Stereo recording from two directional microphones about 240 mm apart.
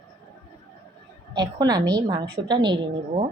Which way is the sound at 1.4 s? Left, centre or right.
Centre.